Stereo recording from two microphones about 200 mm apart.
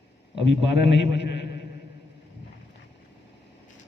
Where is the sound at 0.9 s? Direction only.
60° left (ahead or behind).